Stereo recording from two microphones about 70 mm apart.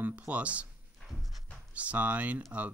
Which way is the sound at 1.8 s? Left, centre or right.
Centre.